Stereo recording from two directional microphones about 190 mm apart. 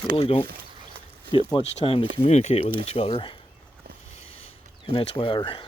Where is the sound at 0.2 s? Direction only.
30° left (ahead or behind).